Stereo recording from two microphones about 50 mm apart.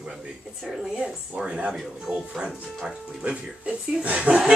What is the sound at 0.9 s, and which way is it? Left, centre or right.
Speech, centre.